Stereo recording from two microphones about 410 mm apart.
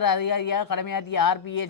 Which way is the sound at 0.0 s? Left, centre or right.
Left.